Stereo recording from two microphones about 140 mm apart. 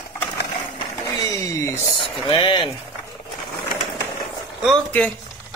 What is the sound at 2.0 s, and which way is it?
Speech, 40° left (ahead or behind).